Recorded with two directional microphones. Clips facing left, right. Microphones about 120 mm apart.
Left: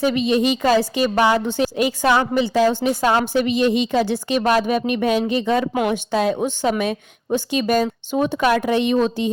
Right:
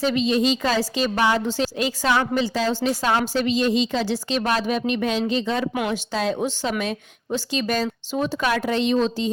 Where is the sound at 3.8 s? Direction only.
55° left (ahead or behind).